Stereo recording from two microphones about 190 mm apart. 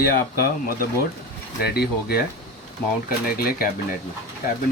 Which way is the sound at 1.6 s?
55° left (ahead or behind).